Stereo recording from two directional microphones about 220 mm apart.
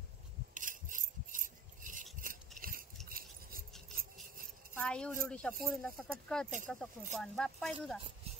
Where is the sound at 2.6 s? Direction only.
40° right (ahead or behind).